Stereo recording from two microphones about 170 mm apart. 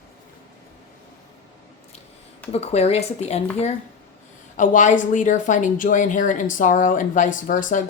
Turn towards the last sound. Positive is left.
turn(degrees=50)  # may be behind; listen again after turning